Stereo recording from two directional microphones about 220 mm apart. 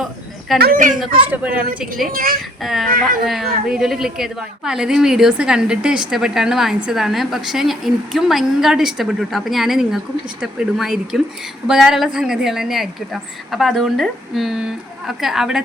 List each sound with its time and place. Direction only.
0.0 s a sound: centre (ahead or behind)
0.6 s speech: 40° right (ahead or behind)
1.3 s a woman's voice: 10° right (ahead or behind)
2.0 s speech: 40° right (ahead or behind)
2.6 s a woman's voice: centre (ahead or behind)